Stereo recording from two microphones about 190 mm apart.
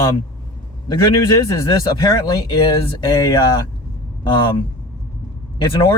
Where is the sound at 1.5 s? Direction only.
15° left (ahead or behind).